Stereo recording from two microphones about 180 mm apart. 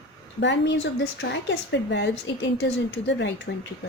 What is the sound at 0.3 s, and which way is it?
A woman's voice, 75° left (ahead or behind).